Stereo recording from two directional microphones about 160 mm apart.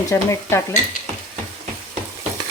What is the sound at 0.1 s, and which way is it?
Stir, 15° left (ahead or behind).